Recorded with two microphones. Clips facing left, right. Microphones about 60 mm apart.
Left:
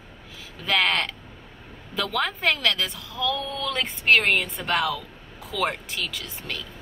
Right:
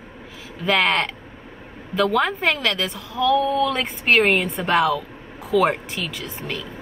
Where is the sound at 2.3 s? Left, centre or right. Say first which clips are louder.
Right 2 dB; centre.